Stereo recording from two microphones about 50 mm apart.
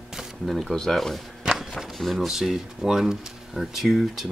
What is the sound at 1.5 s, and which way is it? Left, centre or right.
Speech, centre.